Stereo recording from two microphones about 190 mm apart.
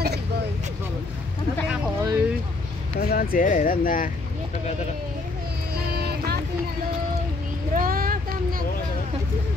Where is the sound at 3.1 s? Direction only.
50° left (ahead or behind).